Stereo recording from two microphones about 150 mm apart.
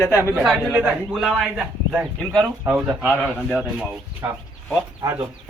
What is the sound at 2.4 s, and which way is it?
Speech, 20° right (ahead or behind).